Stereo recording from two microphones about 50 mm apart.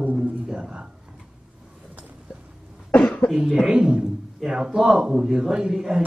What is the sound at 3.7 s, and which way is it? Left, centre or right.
Speech, centre.